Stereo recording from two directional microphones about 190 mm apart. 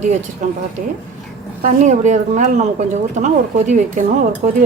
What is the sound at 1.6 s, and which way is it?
A woman's voice, 40° right (ahead or behind).